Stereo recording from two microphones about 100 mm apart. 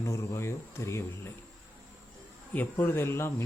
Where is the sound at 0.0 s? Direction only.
30° left (ahead or behind).